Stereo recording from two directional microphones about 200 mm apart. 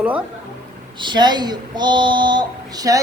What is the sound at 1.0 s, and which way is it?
Speech, 20° right (ahead or behind).